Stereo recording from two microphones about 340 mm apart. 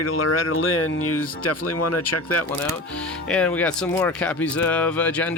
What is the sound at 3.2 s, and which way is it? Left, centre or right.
Speech, centre.